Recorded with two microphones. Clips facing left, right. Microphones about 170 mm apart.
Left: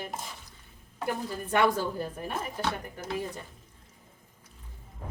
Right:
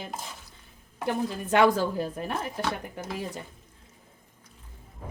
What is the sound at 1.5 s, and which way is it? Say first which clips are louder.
Speech: right 4 dB; 90° right.